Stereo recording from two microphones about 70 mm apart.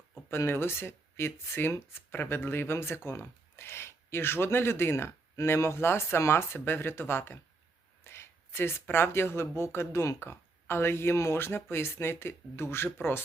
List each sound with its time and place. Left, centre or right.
0.3 s speech: left